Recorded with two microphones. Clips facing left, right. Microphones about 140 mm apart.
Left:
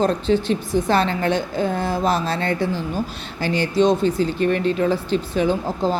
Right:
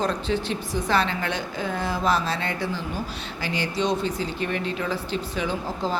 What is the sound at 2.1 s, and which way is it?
A woman's voice, 50° left (ahead or behind).